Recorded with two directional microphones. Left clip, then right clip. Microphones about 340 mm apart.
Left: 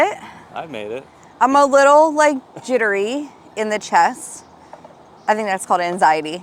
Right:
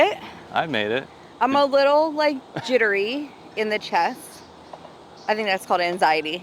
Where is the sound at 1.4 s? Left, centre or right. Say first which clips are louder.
Left 6 dB; left.